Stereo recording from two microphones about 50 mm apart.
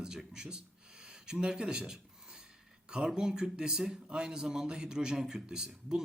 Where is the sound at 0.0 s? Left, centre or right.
Centre.